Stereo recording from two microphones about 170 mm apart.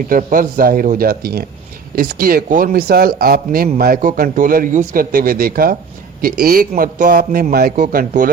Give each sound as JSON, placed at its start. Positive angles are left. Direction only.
{"t": 0.1, "sound": "a man's voice", "side_deg": -50}